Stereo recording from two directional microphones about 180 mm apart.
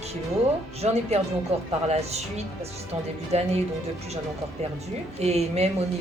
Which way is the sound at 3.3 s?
35° right (ahead or behind).